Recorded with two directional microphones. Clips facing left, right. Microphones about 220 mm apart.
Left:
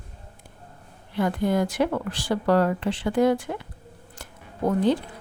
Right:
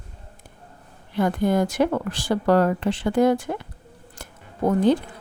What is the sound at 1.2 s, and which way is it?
Speech, 45° right (ahead or behind).